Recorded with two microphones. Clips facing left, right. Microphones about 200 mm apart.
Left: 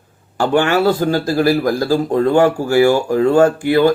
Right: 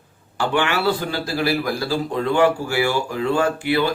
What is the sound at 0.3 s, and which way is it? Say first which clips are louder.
Speech: left 7 dB; 45° left (ahead or behind).